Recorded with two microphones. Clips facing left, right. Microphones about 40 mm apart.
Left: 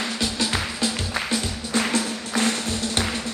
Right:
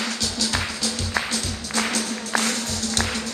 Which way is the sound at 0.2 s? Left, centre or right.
Left.